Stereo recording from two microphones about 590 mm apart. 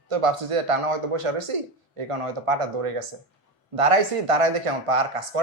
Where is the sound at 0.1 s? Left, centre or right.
Right.